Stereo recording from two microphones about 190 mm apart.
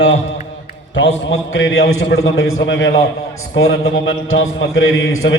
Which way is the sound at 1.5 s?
90° left.